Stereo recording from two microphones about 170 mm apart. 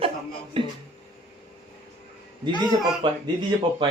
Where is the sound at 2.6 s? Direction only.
25° right (ahead or behind).